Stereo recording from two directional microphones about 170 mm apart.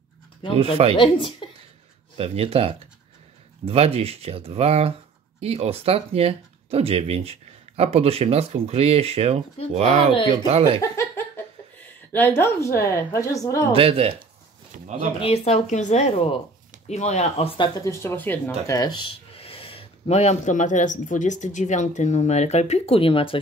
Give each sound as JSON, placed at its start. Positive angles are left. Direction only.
{"t": 0.6, "sound": "speech", "side_deg": -35}
{"t": 0.9, "sound": "speech", "side_deg": 30}
{"t": 2.1, "sound": "speech", "side_deg": -35}
{"t": 10.8, "sound": "laughter", "side_deg": 15}
{"t": 12.1, "sound": "a woman's voice", "side_deg": 15}
{"t": 13.7, "sound": "speech", "side_deg": -35}
{"t": 14.7, "sound": "speech", "side_deg": -45}
{"t": 15.1, "sound": "speech", "side_deg": 35}
{"t": 17.7, "sound": "a woman's voice", "side_deg": 15}
{"t": 18.8, "sound": "speech", "side_deg": 25}